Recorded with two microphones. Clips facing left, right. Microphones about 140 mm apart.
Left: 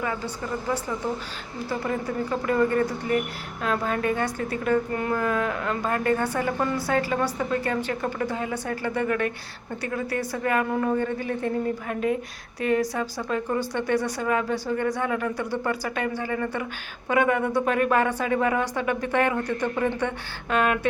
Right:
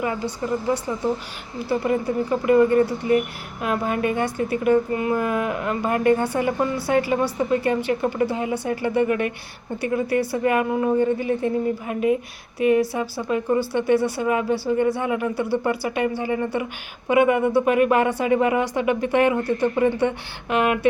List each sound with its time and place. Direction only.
0.7 s speech: 20° right (ahead or behind)